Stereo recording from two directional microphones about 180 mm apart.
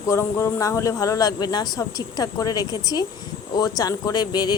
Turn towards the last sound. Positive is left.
turn(degrees=25)  # may be behind; listen again after turning